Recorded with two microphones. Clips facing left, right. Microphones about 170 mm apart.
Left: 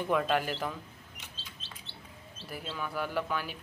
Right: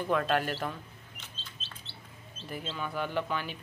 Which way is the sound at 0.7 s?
15° left (ahead or behind).